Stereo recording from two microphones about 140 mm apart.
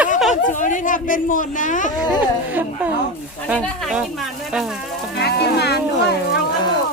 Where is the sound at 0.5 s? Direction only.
65° left (ahead or behind).